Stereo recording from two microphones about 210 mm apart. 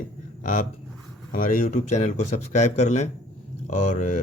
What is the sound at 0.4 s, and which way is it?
Speech, 40° left (ahead or behind).